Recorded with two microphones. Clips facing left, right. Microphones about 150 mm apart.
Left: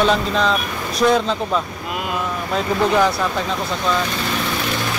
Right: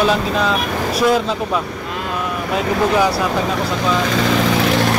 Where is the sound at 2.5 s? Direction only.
10° right (ahead or behind).